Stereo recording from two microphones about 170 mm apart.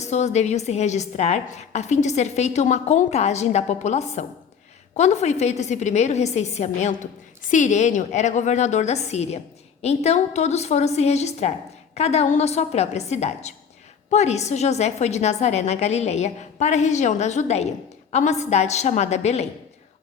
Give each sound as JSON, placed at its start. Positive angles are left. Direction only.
{"t": 0.0, "sound": "a woman's voice", "side_deg": 40}